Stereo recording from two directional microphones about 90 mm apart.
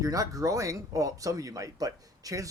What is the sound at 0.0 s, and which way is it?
Speech, 40° right (ahead or behind).